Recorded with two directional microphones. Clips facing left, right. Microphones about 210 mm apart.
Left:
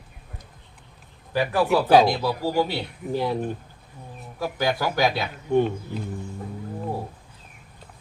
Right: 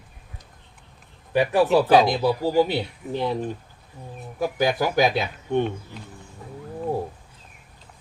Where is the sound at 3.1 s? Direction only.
5° left (ahead or behind).